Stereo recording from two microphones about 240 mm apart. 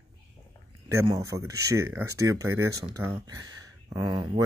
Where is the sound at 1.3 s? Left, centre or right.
Centre.